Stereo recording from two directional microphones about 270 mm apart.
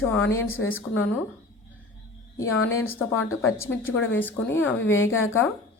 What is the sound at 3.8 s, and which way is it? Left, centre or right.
Speech, left.